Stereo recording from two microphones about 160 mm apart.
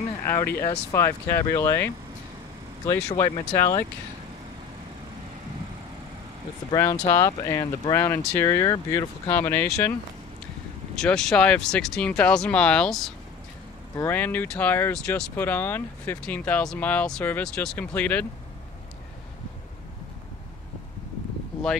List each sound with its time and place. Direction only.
0.2 s speech: 15° left (ahead or behind)
2.9 s speech: 20° left (ahead or behind)
6.7 s speech: 20° left (ahead or behind)
11.0 s speech: 5° left (ahead or behind)